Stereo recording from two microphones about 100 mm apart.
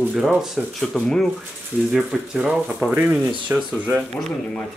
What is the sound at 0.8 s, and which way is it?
Speech, 5° left (ahead or behind).